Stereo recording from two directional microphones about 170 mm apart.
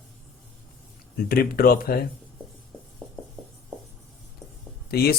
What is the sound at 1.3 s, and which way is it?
Speech, 60° left (ahead or behind).